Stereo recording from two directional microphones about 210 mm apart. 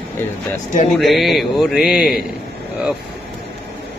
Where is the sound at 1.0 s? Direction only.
Centre (ahead or behind).